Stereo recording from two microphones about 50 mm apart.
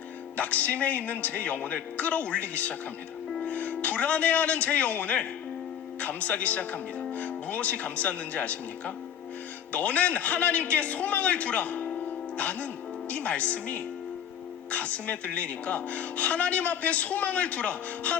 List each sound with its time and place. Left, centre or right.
0.3 s a man's voice: left
9.7 s a woman's voice: left